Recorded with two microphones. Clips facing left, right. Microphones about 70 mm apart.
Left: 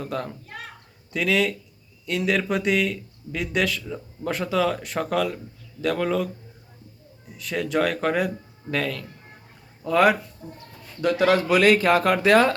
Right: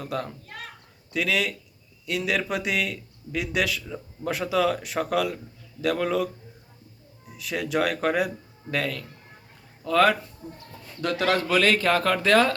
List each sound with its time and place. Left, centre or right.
0.0 s a child's voice: centre
7.3 s a man's voice: centre
9.8 s speech: centre
10.4 s a man's voice: centre